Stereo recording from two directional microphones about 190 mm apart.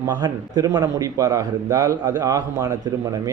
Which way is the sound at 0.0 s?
20° right (ahead or behind).